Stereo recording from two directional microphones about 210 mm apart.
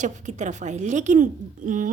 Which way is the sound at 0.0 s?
35° right (ahead or behind).